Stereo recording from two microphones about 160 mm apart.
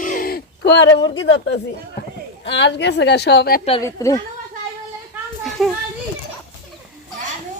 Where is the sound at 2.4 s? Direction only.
90° left.